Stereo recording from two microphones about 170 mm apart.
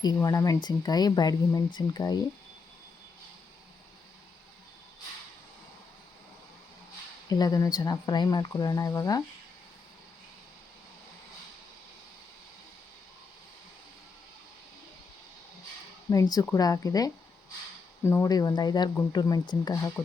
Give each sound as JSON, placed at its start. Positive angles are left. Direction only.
{"t": 0.0, "sound": "speech", "side_deg": 20}
{"t": 7.3, "sound": "speech", "side_deg": 20}
{"t": 16.0, "sound": "speech", "side_deg": 20}